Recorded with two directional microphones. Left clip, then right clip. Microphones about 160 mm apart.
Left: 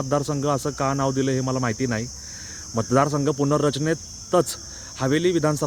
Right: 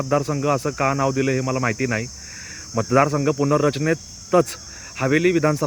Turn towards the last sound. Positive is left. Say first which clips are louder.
# right 3 dB
turn(degrees=-15)  # may be behind; listen again after turning